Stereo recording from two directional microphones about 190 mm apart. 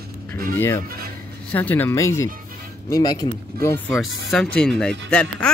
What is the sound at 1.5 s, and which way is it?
Speech, 10° left (ahead or behind).